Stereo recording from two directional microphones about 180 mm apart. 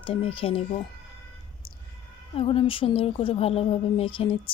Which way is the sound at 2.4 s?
30° left (ahead or behind).